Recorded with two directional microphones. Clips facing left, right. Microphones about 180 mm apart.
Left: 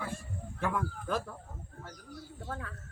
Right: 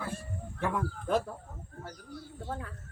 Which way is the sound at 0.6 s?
20° right (ahead or behind).